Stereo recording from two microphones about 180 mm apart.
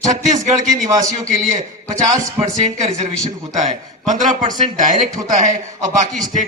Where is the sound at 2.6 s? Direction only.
40° right (ahead or behind).